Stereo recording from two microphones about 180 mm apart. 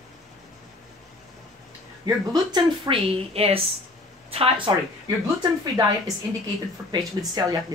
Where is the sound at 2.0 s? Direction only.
25° right (ahead or behind).